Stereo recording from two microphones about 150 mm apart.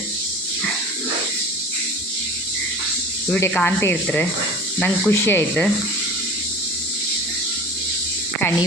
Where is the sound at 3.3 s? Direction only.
10° left (ahead or behind).